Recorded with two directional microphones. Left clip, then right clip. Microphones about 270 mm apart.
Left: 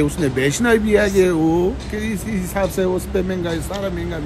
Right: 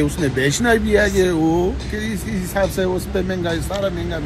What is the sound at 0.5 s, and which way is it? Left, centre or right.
Speech, centre.